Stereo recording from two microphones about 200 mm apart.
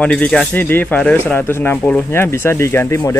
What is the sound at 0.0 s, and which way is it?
Speech, 5° left (ahead or behind).